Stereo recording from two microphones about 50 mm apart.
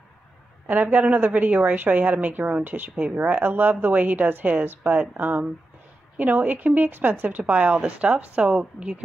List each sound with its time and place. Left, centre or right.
0.7 s a woman's voice: right